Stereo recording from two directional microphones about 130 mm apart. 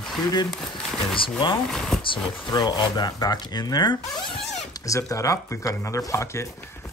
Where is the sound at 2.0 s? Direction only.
35° left (ahead or behind).